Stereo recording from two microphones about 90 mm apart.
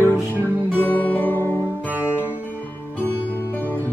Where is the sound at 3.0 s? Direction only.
20° left (ahead or behind).